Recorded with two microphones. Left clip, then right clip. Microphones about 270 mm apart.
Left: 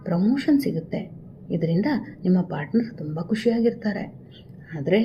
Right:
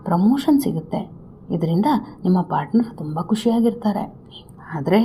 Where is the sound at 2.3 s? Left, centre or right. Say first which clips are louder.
Right 5 dB; right.